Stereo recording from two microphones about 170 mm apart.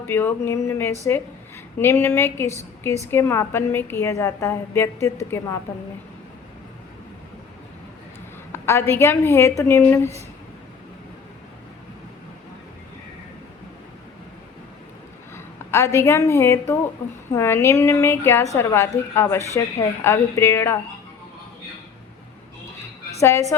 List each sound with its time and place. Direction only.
0.1 s a woman's voice: 10° left (ahead or behind)
8.5 s a woman's voice: 15° left (ahead or behind)
15.7 s a woman's voice: 15° left (ahead or behind)
23.2 s a woman's voice: 15° left (ahead or behind)